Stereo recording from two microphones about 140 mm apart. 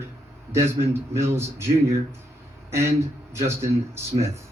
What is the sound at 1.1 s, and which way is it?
Speech, 15° right (ahead or behind).